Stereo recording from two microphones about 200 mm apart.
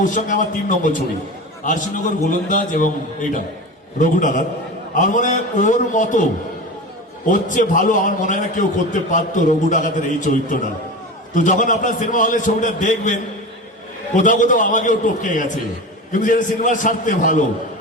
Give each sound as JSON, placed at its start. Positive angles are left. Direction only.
{"t": 0.0, "sound": "a man's voice", "side_deg": 40}
{"t": 7.3, "sound": "a man's voice", "side_deg": 40}
{"t": 11.3, "sound": "a man's voice", "side_deg": 40}
{"t": 14.2, "sound": "a man's voice", "side_deg": 40}